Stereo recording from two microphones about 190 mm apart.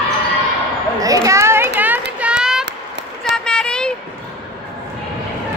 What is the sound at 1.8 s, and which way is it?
Child singing, 10° right (ahead or behind).